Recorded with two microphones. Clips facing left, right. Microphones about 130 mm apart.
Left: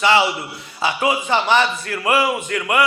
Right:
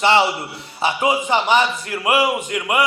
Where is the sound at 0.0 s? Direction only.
25° right (ahead or behind).